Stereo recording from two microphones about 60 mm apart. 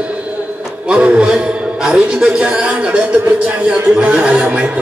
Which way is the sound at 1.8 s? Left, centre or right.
Centre.